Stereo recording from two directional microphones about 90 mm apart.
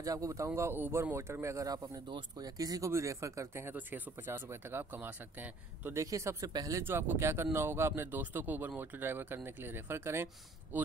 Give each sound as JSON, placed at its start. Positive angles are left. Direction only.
{"t": 0.0, "sound": "speech", "side_deg": -40}
{"t": 2.0, "sound": "speech", "side_deg": -60}
{"t": 2.4, "sound": "speech", "side_deg": -45}
{"t": 5.9, "sound": "speech", "side_deg": -35}
{"t": 6.8, "sound": "speech", "side_deg": -25}